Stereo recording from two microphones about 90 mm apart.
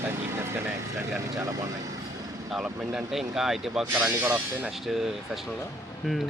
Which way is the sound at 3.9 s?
20° right (ahead or behind).